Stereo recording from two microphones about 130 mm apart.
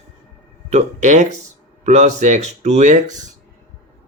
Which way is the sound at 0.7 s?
65° right (ahead or behind).